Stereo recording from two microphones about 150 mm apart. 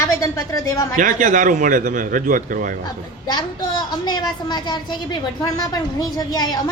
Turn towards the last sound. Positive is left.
turn(degrees=25)  # may be behind; listen again after turning